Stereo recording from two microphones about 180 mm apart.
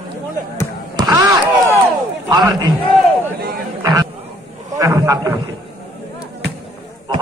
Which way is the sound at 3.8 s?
20° right (ahead or behind).